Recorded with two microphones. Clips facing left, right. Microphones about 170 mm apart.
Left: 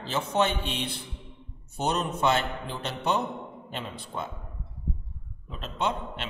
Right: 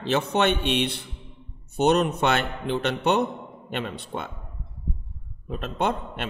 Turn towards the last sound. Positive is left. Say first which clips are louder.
# right 4 dB
turn(degrees=-55)  # may be behind; listen again after turning